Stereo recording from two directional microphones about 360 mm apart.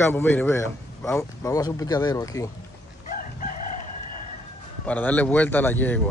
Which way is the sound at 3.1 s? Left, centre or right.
Left.